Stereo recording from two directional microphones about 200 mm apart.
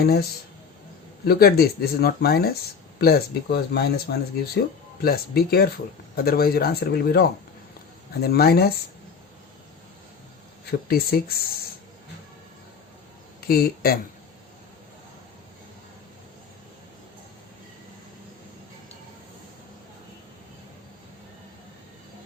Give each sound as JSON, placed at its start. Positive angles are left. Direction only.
{"t": 0.0, "sound": "speech", "side_deg": 50}
{"t": 10.7, "sound": "speech", "side_deg": 50}
{"t": 13.5, "sound": "speech", "side_deg": 50}